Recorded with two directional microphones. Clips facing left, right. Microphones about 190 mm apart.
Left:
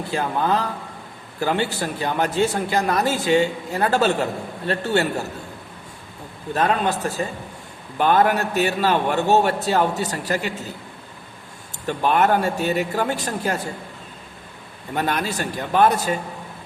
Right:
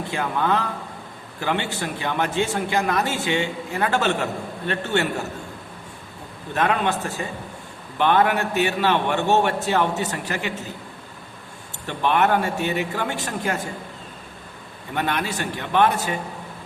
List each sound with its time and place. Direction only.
0.1 s a man's voice: 35° left (ahead or behind)
6.5 s a man's voice: 35° left (ahead or behind)
11.9 s a man's voice: 40° left (ahead or behind)
14.9 s a man's voice: 40° left (ahead or behind)